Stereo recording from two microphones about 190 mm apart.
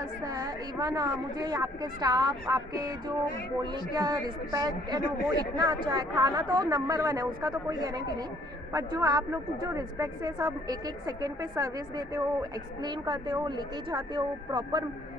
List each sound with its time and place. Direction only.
0.2 s speech: 20° right (ahead or behind)